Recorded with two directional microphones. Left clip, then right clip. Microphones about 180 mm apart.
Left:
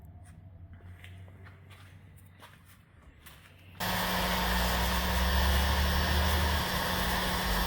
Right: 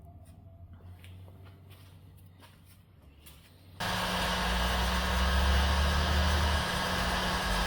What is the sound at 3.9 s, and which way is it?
Vehicle, centre (ahead or behind).